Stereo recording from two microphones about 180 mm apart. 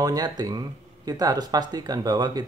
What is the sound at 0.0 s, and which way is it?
Speech, 20° right (ahead or behind).